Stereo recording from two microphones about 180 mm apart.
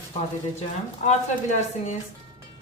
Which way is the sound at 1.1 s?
40° left (ahead or behind).